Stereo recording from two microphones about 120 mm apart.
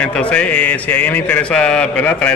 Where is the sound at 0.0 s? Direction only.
10° left (ahead or behind).